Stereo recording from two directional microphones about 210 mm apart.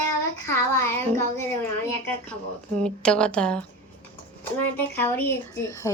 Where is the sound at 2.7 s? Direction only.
5° left (ahead or behind).